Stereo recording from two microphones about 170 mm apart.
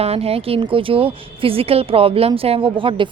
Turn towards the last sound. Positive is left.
turn(degrees=-30)  # may be behind; listen again after turning